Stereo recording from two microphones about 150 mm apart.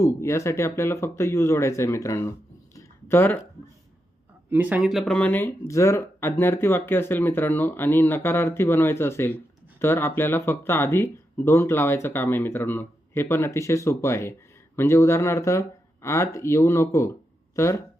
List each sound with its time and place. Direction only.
0.0 s speech: 20° left (ahead or behind)
2.7 s a sound: 15° left (ahead or behind)
4.4 s speech: 10° right (ahead or behind); by 17.7 s 20° left (ahead or behind)